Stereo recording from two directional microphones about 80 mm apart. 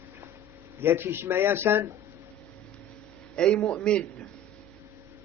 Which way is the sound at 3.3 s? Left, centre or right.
Centre.